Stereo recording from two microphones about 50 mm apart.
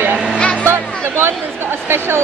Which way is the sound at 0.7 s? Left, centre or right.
Right.